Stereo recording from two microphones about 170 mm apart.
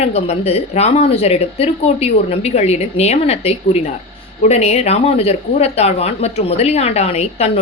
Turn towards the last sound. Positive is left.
turn(degrees=40)  # may be behind; listen again after turning